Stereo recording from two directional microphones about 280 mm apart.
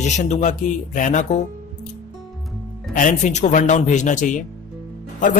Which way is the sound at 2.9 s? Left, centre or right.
Left.